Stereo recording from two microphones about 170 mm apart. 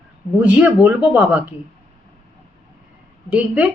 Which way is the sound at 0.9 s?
10° right (ahead or behind).